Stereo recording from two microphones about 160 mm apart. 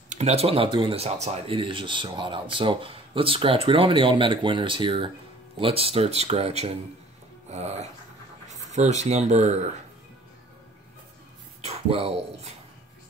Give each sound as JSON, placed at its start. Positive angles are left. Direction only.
{"t": 0.1, "sound": "speech", "side_deg": -40}
{"t": 7.5, "sound": "dog", "side_deg": -45}
{"t": 8.5, "sound": "speech", "side_deg": -45}
{"t": 11.6, "sound": "speech", "side_deg": -40}